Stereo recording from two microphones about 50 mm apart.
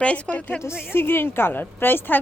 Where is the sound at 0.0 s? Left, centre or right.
Left.